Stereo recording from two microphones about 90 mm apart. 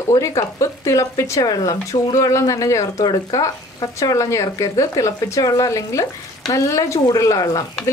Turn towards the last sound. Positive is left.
turn(degrees=45)  # may be behind; listen again after turning